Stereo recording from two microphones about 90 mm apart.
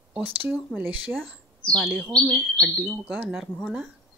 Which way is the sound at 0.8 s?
15° right (ahead or behind).